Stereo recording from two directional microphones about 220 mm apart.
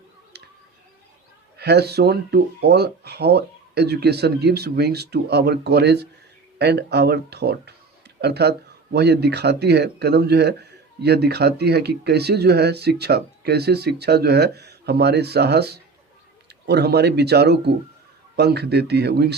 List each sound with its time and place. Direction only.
1.5 s speech: 45° right (ahead or behind)